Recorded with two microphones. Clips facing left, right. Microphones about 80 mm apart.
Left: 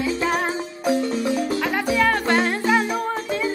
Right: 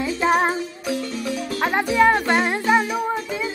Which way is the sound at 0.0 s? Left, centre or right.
Right.